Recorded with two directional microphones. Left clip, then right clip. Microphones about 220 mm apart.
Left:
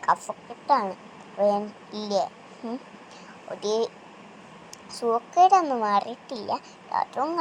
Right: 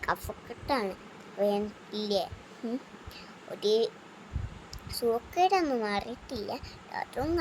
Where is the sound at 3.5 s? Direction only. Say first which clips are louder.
Left 1 dB; 5° right (ahead or behind).